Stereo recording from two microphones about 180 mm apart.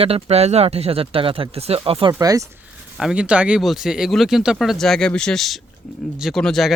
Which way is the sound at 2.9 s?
5° right (ahead or behind).